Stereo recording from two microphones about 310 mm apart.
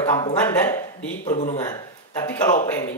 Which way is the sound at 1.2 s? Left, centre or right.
Left.